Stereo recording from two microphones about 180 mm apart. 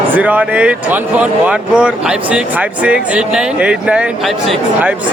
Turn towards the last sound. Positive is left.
turn(degrees=-5)  # may be behind; listen again after turning